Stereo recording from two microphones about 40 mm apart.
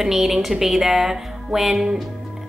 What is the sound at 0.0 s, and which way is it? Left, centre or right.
A woman's voice, centre.